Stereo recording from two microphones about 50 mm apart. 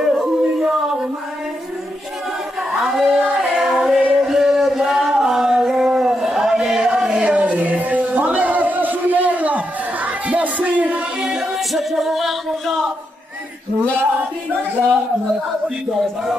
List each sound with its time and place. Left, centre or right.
0.0 s singing: centre
2.7 s music: centre
7.1 s music: right
10.0 s a sound: right
11.1 s music: centre
15.9 s music: centre